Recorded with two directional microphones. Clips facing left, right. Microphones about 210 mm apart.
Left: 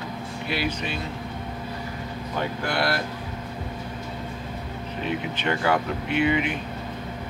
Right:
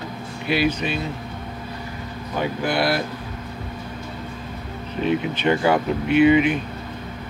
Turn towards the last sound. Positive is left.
turn(degrees=-20)  # may be behind; listen again after turning